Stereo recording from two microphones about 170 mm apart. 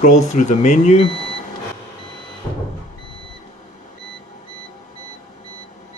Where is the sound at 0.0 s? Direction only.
45° left (ahead or behind).